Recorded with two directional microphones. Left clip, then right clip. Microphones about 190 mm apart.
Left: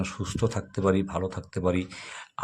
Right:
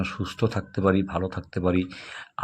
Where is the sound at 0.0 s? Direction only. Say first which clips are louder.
Right 2 dB; 10° right (ahead or behind).